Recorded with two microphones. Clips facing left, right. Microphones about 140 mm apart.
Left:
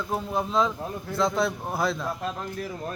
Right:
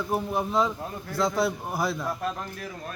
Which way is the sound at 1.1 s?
20° left (ahead or behind).